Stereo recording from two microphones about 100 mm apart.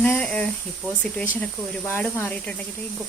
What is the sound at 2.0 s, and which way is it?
Speech, 15° left (ahead or behind).